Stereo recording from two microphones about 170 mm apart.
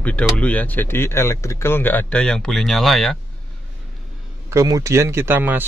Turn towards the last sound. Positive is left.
turn(degrees=-10)  # may be behind; listen again after turning